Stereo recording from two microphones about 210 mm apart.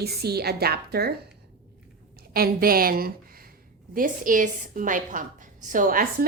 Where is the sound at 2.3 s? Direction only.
45° right (ahead or behind).